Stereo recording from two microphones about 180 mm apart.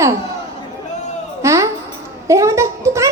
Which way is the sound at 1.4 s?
15° right (ahead or behind).